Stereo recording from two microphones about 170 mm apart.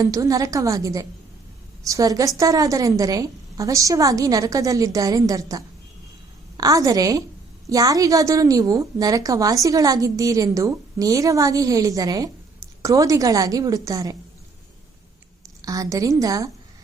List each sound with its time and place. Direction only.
0.0 s a woman's voice: 20° right (ahead or behind)
15.6 s a woman's voice: 20° right (ahead or behind)